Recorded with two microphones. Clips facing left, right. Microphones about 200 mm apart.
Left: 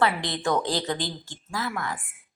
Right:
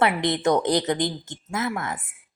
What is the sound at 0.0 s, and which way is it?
A woman's voice, 20° right (ahead or behind).